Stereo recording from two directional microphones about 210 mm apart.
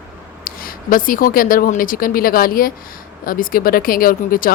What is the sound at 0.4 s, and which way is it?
Speech, 40° left (ahead or behind).